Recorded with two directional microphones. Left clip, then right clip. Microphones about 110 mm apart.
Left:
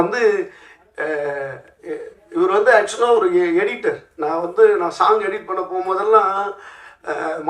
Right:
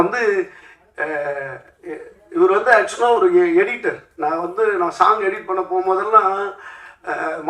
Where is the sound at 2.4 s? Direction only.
20° left (ahead or behind).